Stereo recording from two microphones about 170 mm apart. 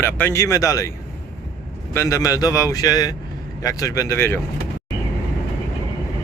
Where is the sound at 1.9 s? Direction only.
15° left (ahead or behind).